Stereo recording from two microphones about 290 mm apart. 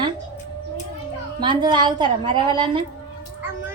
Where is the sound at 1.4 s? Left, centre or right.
Centre.